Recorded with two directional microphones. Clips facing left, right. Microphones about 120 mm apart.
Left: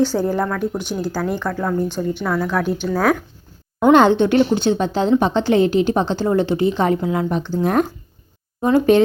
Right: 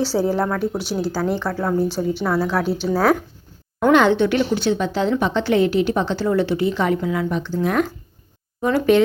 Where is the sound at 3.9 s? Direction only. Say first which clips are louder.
Left 3 dB; 35° left (ahead or behind).